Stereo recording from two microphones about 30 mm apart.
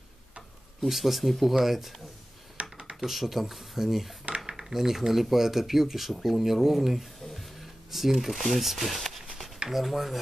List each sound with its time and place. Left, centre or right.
0.7 s speech: centre
2.6 s computer keyboard: right
3.0 s speech: centre